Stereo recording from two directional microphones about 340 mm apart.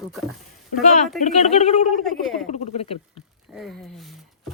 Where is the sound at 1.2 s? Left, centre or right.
Centre.